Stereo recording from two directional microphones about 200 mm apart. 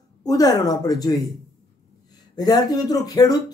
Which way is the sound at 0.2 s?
20° left (ahead or behind).